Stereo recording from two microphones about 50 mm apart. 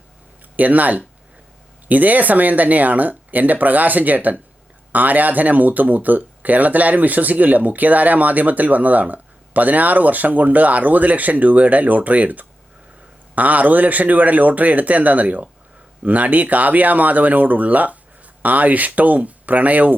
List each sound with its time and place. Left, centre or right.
0.5 s speech: right